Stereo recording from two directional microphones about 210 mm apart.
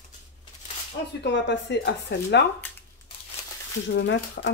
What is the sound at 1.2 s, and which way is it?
Speech, 55° left (ahead or behind).